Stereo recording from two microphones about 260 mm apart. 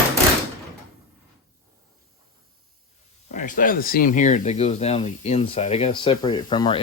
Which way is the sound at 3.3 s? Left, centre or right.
Left.